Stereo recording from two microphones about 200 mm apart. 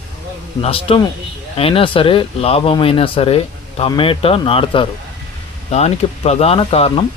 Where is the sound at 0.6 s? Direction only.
30° left (ahead or behind).